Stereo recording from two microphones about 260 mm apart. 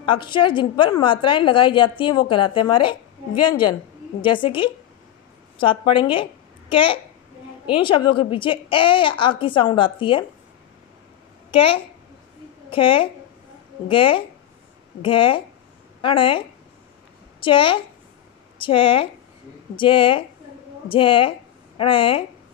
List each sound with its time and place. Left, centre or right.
0.0 s a woman's voice: centre
11.5 s a woman's voice: left